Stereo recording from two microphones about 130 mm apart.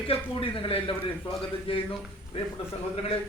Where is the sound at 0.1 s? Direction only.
45° left (ahead or behind).